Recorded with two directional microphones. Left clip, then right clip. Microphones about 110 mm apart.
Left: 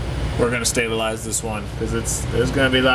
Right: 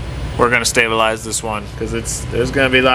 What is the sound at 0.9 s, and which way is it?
Speech, 15° right (ahead or behind).